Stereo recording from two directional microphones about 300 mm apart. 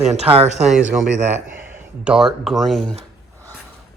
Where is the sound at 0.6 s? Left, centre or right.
Centre.